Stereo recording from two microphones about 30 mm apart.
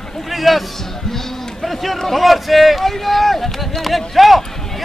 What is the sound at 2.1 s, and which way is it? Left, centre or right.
A man's voice, centre.